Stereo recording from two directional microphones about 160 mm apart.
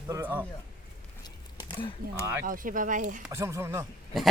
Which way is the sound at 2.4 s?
60° right (ahead or behind).